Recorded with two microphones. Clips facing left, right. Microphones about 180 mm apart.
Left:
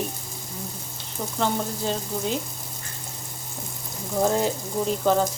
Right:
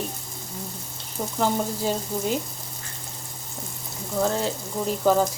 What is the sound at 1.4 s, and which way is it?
Speech, 10° right (ahead or behind).